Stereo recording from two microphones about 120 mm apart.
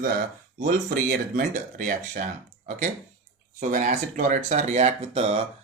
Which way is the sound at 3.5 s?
90° right.